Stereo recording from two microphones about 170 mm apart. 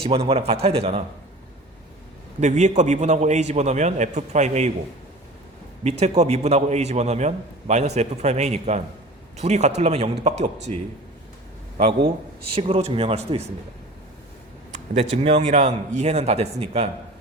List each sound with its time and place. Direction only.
0.0 s a man's voice: 35° right (ahead or behind)
2.4 s a man's voice: 45° right (ahead or behind)
5.8 s a man's voice: 40° right (ahead or behind)
12.5 s a man's voice: 35° right (ahead or behind)
14.7 s a man's voice: 40° right (ahead or behind)